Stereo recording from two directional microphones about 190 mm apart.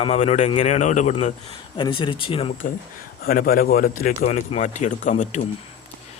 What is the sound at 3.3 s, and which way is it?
Speech, 50° left (ahead or behind).